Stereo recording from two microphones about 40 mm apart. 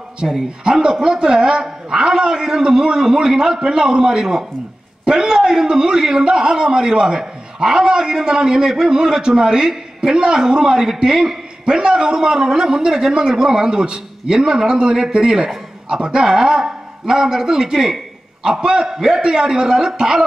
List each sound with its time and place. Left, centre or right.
0.2 s a man's voice: centre
11.6 s a man's voice: right